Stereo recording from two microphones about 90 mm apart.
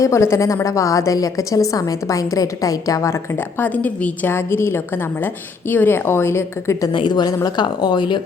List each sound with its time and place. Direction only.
0.0 s a woman's voice: 35° left (ahead or behind)
3.6 s a woman's voice: 15° left (ahead or behind)
6.9 s speech: 60° left (ahead or behind)